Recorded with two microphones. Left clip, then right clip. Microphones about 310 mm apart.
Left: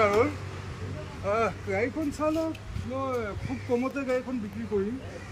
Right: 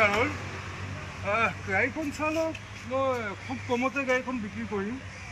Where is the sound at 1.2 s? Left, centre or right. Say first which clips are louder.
Even; centre.